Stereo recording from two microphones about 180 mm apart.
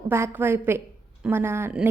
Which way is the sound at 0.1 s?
10° right (ahead or behind).